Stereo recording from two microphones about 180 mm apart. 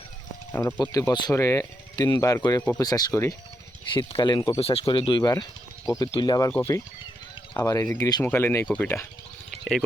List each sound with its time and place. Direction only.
0.5 s speech: 20° left (ahead or behind)
3.9 s speech: 25° left (ahead or behind)
9.5 s a sound: centre (ahead or behind)